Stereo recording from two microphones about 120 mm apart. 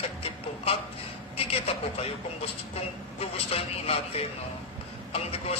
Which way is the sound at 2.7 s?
55° left (ahead or behind).